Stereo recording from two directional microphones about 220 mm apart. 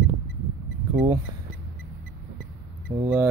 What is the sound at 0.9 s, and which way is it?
Speech, 15° right (ahead or behind).